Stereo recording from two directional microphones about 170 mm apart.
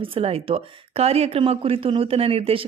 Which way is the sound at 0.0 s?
35° right (ahead or behind).